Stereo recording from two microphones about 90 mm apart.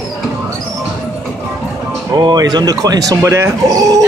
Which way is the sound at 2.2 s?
50° right (ahead or behind).